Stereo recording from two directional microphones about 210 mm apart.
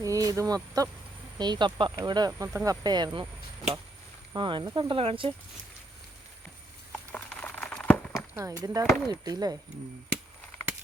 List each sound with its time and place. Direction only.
0.0 s speech: 15° right (ahead or behind)
4.4 s speech: 20° right (ahead or behind)
7.1 s crumpling: 10° left (ahead or behind)
8.4 s speech: 15° right (ahead or behind)